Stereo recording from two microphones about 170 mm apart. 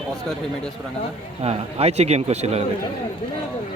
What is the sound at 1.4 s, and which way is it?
A man's voice, 40° right (ahead or behind).